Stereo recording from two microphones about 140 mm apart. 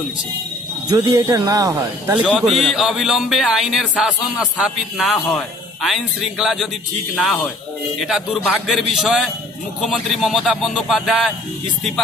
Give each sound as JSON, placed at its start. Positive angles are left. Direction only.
{"t": 0.8, "sound": "speech", "side_deg": -25}
{"t": 2.4, "sound": "speech", "side_deg": 0}